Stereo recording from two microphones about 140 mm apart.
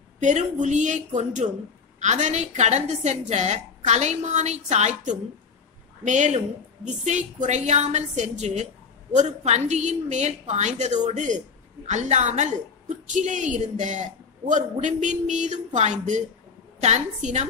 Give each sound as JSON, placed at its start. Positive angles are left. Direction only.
{"t": 0.2, "sound": "a woman's voice", "side_deg": -60}